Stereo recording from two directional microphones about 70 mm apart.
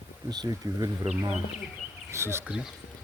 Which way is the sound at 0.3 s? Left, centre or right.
Right.